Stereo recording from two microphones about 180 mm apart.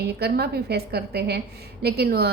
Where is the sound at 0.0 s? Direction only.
65° right (ahead or behind).